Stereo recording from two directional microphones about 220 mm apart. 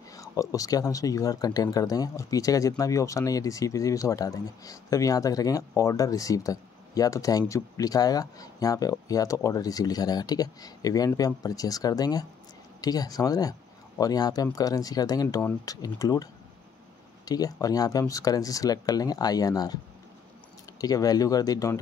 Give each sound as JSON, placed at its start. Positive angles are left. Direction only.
{"t": 0.1, "sound": "speech", "side_deg": 15}
{"t": 20.8, "sound": "speech", "side_deg": 15}